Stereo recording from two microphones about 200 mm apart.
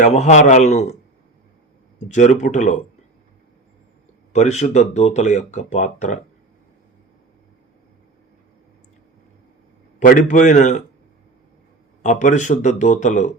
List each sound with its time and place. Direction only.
0.0 s speech: 35° left (ahead or behind)
2.1 s speech: 40° left (ahead or behind)
4.3 s speech: 35° left (ahead or behind)
10.0 s speech: 40° left (ahead or behind)
12.0 s speech: 35° left (ahead or behind)